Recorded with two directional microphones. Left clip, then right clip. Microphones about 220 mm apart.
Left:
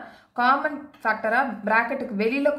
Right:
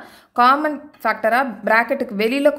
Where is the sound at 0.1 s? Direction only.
50° right (ahead or behind).